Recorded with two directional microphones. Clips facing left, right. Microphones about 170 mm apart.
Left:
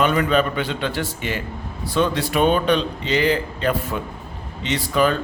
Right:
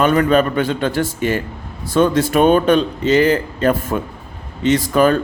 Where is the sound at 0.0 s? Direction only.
45° right (ahead or behind).